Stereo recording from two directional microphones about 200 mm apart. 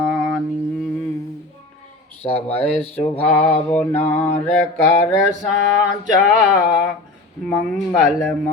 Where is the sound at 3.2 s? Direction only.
5° left (ahead or behind).